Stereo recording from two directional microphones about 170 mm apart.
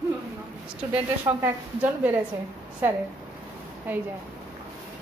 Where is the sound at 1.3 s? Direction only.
20° right (ahead or behind).